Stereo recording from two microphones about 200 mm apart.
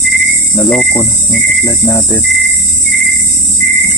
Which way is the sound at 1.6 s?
10° left (ahead or behind).